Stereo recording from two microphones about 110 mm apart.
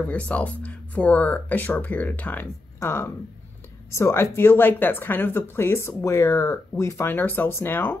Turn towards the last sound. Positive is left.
turn(degrees=20)  # may be behind; listen again after turning